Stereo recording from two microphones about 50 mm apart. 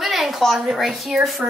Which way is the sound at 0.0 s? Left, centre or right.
Centre.